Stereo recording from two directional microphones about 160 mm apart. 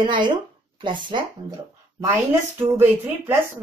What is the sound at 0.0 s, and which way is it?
Speech, 30° right (ahead or behind).